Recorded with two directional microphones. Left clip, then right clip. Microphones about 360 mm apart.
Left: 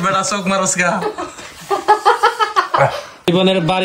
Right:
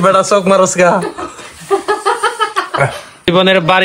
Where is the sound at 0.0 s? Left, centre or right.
Centre.